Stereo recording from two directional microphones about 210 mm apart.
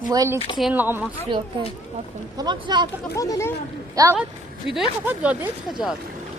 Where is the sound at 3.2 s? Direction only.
15° left (ahead or behind).